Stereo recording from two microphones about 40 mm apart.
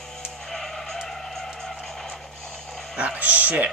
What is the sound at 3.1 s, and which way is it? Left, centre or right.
Speech, right.